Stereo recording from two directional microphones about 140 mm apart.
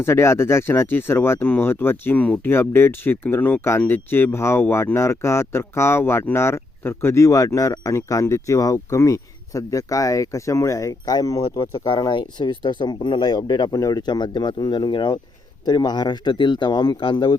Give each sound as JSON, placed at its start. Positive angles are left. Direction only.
{"t": 0.0, "sound": "speech", "side_deg": 20}